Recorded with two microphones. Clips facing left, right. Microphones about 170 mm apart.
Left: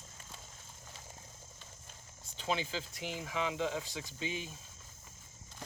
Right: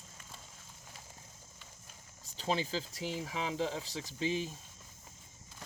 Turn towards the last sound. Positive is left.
turn(degrees=-35)  # may be behind; listen again after turning